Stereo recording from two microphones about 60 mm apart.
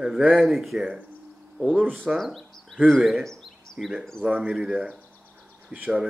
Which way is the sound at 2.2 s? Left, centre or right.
Centre.